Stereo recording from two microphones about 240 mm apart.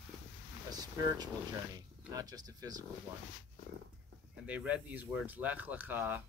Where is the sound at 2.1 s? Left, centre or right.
Centre.